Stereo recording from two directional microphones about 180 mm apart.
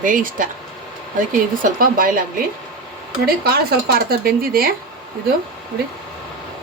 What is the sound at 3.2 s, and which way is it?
Speech, 60° right (ahead or behind).